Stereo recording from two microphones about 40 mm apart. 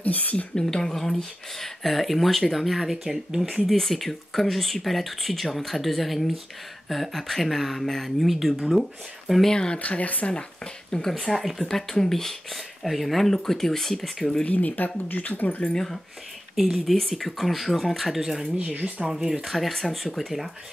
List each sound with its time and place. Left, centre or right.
0.0 s a woman's voice: left
0.6 s speech: centre
3.0 s speech: centre
3.7 s speech: centre
9.5 s speech: left
9.8 s speech: left
10.9 s speech: centre
14.4 s speech: left
15.7 s speech: centre
18.1 s speech: centre
18.6 s speech: right
19.0 s speech: centre